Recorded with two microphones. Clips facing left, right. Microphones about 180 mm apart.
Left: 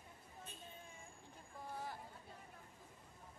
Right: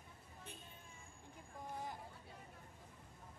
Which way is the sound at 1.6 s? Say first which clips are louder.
Right 1 dB; 15° right (ahead or behind).